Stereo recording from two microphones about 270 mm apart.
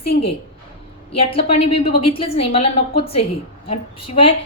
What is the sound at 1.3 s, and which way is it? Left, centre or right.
A woman's voice, left.